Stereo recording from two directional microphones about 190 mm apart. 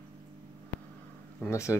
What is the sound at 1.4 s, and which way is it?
Speech, 15° left (ahead or behind).